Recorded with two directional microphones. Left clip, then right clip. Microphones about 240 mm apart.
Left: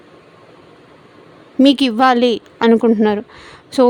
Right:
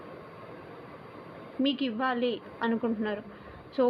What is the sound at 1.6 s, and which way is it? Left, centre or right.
A woman's voice, left.